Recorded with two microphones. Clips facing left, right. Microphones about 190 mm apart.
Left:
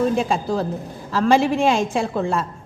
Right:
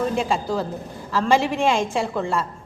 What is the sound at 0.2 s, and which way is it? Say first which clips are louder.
Speech: left 2 dB; 15° left (ahead or behind).